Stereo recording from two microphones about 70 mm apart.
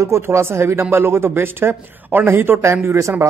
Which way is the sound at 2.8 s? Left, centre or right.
Right.